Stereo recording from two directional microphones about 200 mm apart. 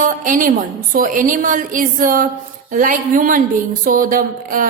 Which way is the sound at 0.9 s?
40° right (ahead or behind).